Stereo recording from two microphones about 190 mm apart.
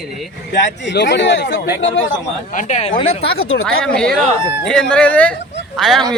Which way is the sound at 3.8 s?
5° left (ahead or behind).